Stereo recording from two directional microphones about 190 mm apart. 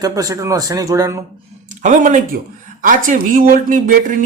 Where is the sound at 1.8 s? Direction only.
40° right (ahead or behind).